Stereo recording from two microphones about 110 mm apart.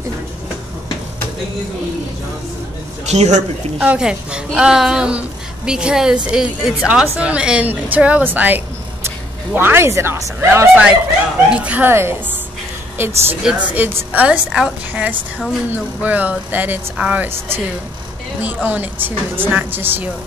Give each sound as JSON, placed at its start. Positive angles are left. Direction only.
{"t": 3.1, "sound": "a man's voice", "side_deg": -90}
{"t": 3.7, "sound": "a woman's voice", "side_deg": -10}
{"t": 11.5, "sound": "a woman's voice", "side_deg": -10}
{"t": 13.4, "sound": "a woman's voice", "side_deg": -10}